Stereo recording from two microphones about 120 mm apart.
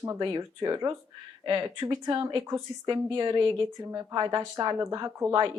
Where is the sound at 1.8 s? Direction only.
25° right (ahead or behind).